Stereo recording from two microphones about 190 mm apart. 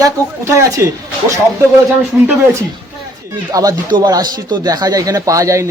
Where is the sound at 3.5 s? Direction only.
20° right (ahead or behind).